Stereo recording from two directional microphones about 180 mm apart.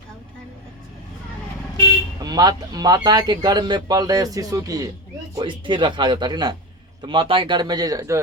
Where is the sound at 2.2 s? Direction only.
20° right (ahead or behind).